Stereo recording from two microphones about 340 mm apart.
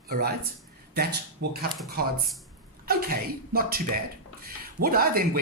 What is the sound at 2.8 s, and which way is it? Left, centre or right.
Speech, right.